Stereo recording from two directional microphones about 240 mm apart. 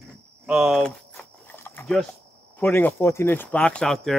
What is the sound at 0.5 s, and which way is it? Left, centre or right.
Speech, centre.